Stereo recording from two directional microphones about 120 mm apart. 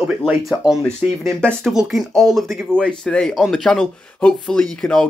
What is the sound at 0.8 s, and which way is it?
Speech, 10° left (ahead or behind).